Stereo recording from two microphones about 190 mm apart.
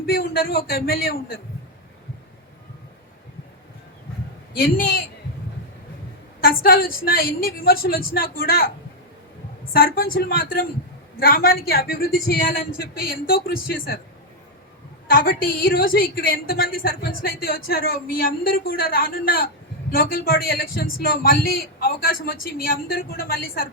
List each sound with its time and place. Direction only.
0.0 s a woman's voice: 50° left (ahead or behind)
4.5 s a woman's voice: 50° left (ahead or behind)
6.6 s a woman's voice: 50° left (ahead or behind)
9.7 s a woman's voice: 50° left (ahead or behind)
15.0 s a woman's voice: 50° left (ahead or behind)